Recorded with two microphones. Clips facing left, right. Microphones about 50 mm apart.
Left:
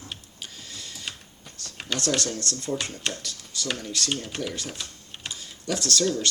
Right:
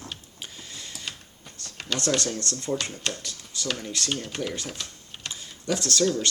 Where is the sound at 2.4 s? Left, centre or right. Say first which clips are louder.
Right 1 dB; right.